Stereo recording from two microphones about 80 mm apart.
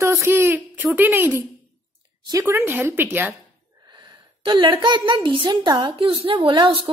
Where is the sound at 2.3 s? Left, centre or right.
Right.